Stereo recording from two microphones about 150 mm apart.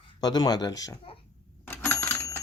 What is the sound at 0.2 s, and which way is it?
Speech, 25° left (ahead or behind).